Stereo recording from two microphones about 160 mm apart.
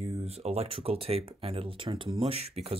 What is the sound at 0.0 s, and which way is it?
Speech, 40° right (ahead or behind).